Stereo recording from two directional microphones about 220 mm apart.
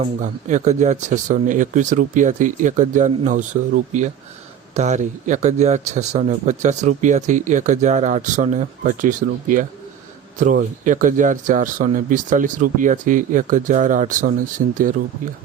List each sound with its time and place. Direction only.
0.2 s speech: 35° right (ahead or behind)